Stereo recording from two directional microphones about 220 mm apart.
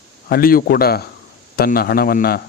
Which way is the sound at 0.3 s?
40° left (ahead or behind).